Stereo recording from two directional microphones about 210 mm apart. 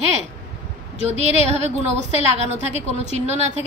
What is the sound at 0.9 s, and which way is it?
A woman's voice, 30° right (ahead or behind).